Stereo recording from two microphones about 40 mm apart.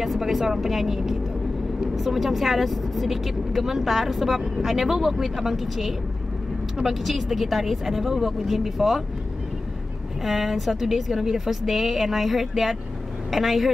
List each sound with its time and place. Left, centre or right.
0.0 s speech: centre
10.2 s a woman's voice: centre